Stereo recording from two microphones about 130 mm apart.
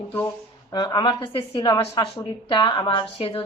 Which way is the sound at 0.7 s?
35° left (ahead or behind).